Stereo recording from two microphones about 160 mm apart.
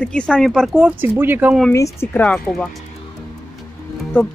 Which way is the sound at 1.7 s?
15° left (ahead or behind).